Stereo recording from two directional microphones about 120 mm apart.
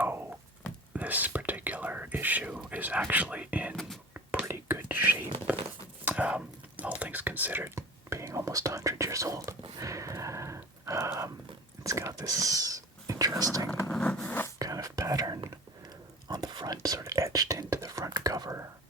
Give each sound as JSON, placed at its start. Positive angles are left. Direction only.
{"t": 0.0, "sound": "a sound", "side_deg": -15}
{"t": 0.9, "sound": "whispering", "side_deg": -15}
{"t": 7.0, "sound": "speech", "side_deg": -15}
{"t": 9.6, "sound": "a sound", "side_deg": -30}
{"t": 11.8, "sound": "whispering", "side_deg": -25}
{"t": 13.9, "sound": "zipper", "side_deg": 10}
{"t": 14.6, "sound": "whispering", "side_deg": -30}